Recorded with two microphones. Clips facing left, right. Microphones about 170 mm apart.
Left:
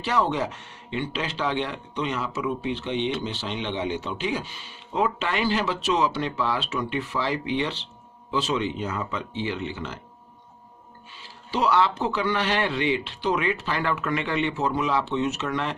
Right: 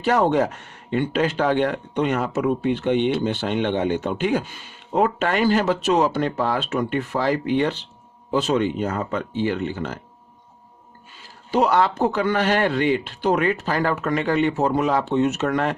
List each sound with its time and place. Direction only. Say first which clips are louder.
0.0 s speech: right 6 dB; 50° right (ahead or behind)
11.2 s speech: right 6 dB; 45° right (ahead or behind)